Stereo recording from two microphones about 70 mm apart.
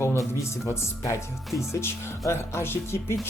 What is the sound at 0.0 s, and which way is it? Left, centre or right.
Speech, left.